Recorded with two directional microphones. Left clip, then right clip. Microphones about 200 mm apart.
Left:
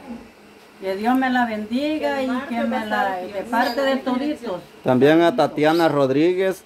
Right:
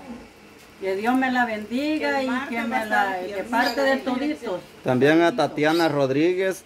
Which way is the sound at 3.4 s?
20° left (ahead or behind).